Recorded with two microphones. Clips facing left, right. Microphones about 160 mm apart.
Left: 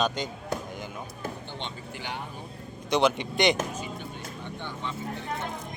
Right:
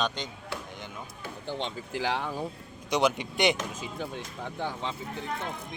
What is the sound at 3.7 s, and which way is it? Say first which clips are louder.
Speech: right 1 dB; 90° right.